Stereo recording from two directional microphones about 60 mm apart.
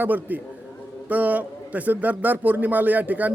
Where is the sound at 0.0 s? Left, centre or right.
Right.